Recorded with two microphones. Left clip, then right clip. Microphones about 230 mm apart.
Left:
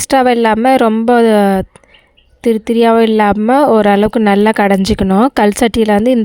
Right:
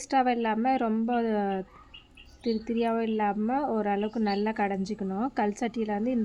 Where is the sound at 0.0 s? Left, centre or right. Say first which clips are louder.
Left 16 dB; left.